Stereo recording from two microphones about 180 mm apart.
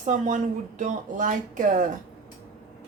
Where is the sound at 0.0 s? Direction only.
45° right (ahead or behind).